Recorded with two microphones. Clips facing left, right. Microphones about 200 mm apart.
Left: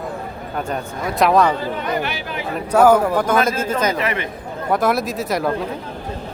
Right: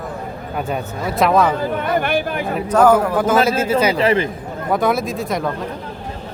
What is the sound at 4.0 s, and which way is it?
Speech, 30° right (ahead or behind).